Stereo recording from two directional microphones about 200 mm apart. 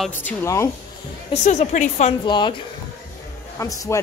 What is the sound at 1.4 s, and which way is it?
Speech, 35° left (ahead or behind).